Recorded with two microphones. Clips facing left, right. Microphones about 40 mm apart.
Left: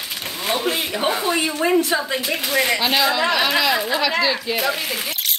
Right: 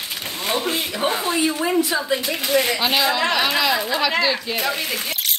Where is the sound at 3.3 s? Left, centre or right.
Centre.